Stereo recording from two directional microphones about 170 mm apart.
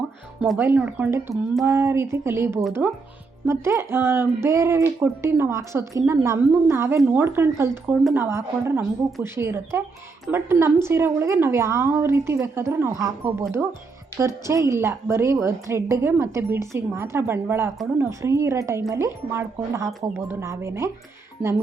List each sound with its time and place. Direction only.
0.6 s a woman's voice: 10° right (ahead or behind)